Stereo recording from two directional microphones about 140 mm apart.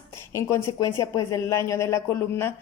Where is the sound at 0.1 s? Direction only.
20° left (ahead or behind).